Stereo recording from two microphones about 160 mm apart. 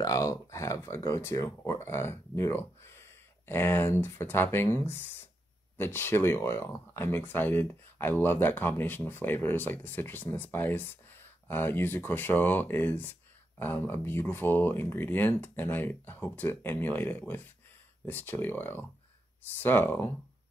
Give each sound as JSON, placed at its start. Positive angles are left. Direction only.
{"t": 0.0, "sound": "speech", "side_deg": 20}